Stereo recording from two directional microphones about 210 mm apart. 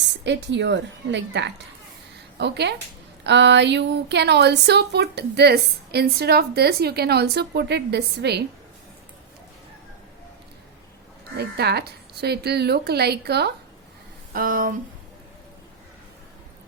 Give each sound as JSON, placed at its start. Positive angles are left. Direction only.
{"t": 0.3, "sound": "a woman's voice", "side_deg": -55}
{"t": 11.3, "sound": "speech", "side_deg": -50}